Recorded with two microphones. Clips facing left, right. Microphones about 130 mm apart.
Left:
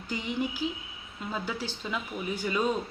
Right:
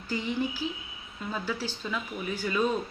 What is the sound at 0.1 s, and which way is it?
Speech, 15° left (ahead or behind).